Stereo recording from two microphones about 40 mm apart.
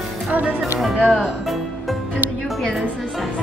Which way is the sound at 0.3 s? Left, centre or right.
Right.